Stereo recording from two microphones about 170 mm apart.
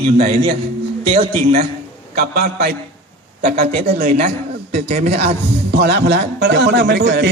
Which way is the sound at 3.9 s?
60° right (ahead or behind).